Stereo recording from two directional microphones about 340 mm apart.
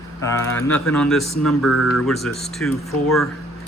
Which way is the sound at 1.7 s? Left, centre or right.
Left.